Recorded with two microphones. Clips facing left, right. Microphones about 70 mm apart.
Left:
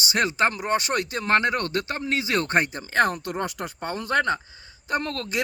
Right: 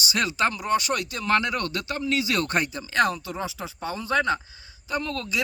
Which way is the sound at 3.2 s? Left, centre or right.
Left.